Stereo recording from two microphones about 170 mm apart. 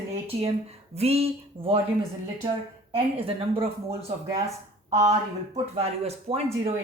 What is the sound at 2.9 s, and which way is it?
A woman's voice, 35° right (ahead or behind).